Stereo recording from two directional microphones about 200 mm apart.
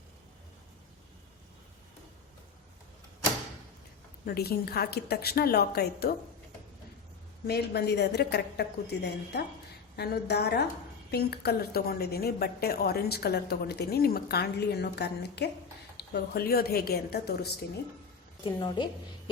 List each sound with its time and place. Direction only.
4.3 s a woman's voice: 50° left (ahead or behind)
7.4 s a woman's voice: 55° left (ahead or behind)
18.4 s a woman's voice: 25° left (ahead or behind)